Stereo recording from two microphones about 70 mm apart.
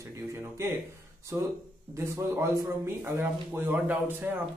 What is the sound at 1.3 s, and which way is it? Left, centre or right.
Speech, right.